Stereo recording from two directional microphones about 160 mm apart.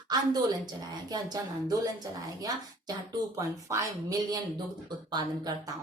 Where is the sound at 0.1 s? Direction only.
25° right (ahead or behind).